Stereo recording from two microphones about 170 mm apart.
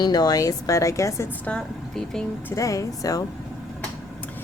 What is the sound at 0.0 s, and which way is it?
Speech, 25° left (ahead or behind).